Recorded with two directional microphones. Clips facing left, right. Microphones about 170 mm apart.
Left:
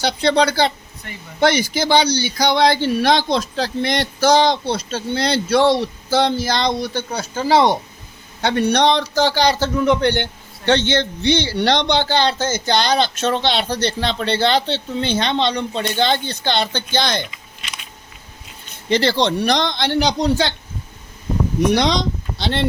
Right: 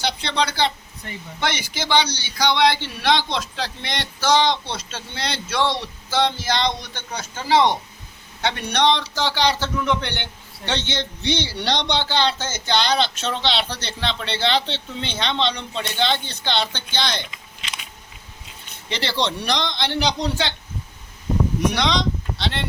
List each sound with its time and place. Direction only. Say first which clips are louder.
0.0 s speech: left 7 dB; 40° left (ahead or behind)
10.7 s speech: left 9 dB; 55° left (ahead or behind)
18.9 s speech: left 8 dB; 45° left (ahead or behind)
21.8 s speech: left 3 dB; 40° left (ahead or behind)